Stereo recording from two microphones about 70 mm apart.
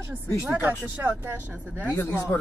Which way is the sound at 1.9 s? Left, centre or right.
Left.